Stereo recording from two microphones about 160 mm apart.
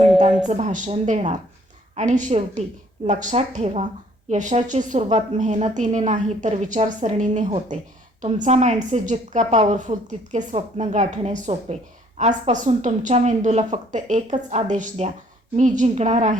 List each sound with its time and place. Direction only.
0.4 s a woman's voice: 45° right (ahead or behind)